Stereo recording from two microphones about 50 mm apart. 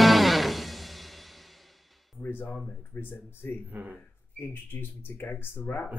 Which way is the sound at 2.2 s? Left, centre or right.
Left.